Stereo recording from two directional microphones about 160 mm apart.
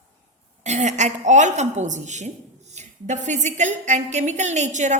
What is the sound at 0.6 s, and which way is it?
A woman's voice, 45° right (ahead or behind).